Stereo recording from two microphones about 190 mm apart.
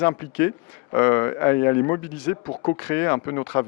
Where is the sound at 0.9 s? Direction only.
15° left (ahead or behind).